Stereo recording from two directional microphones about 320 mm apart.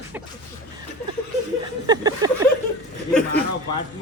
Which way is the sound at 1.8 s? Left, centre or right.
Centre.